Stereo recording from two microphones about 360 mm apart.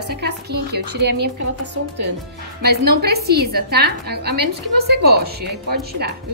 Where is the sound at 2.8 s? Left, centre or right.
Right.